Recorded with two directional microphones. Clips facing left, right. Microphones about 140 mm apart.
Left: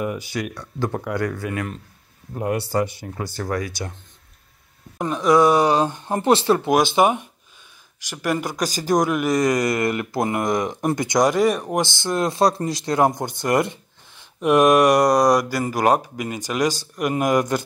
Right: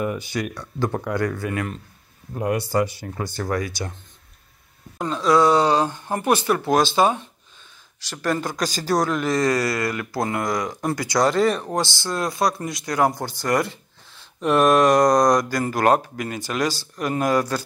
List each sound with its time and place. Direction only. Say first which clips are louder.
0.0 s speech: even; 10° left (ahead or behind)
2.3 s speech: right 1 dB; 30° left (ahead or behind)
3.2 s speech: right 1 dB; 5° left (ahead or behind)
4.9 s speech: left 2 dB; 15° left (ahead or behind)
6.7 s speech: even; 15° left (ahead or behind)